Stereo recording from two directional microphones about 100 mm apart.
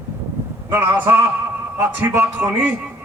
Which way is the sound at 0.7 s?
25° right (ahead or behind).